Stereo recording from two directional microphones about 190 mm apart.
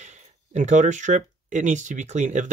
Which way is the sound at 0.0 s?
40° right (ahead or behind).